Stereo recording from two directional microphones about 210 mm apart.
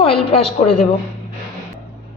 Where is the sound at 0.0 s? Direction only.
30° left (ahead or behind).